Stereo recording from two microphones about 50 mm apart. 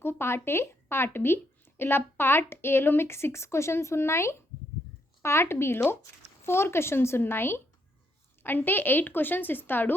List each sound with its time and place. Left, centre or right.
0.0 s a woman's voice: left